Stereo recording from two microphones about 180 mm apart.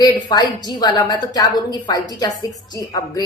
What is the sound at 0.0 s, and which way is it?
A woman's voice, 25° left (ahead or behind).